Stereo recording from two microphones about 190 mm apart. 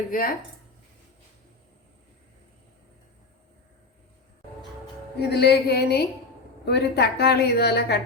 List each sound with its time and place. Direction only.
0.1 s speech: 50° left (ahead or behind)
5.2 s a woman's voice: 60° left (ahead or behind)